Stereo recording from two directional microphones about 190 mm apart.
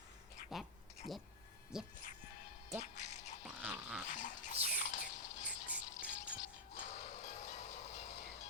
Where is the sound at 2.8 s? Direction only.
40° left (ahead or behind).